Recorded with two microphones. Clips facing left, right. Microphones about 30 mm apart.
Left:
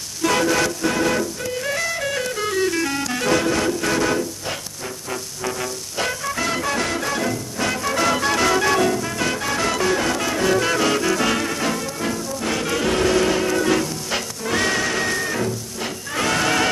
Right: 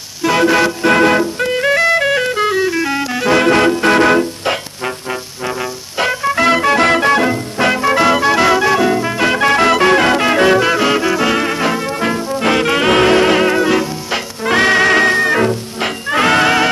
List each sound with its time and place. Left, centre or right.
0.2 s music: centre
0.5 s music: right
2.6 s music: right
3.3 s music: right
5.1 s music: right
8.9 s music: right
10.6 s music: right
11.4 s music: right
13.7 s music: right
14.4 s music: right